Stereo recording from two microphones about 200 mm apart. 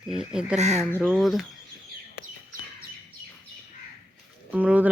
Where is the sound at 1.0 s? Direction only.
Centre (ahead or behind).